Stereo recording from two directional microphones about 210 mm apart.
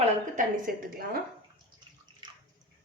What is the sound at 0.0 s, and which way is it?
A woman's voice, 40° right (ahead or behind).